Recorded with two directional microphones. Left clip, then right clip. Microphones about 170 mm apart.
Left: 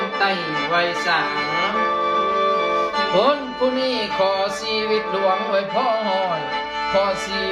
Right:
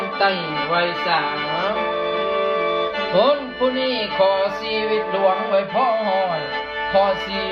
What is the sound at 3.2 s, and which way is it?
Music, 15° left (ahead or behind).